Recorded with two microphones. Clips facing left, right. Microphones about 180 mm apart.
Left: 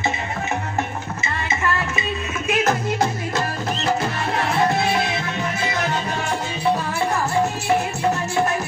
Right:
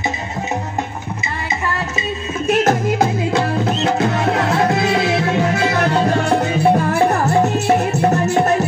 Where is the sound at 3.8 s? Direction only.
75° right (ahead or behind); by 7.2 s 55° right (ahead or behind).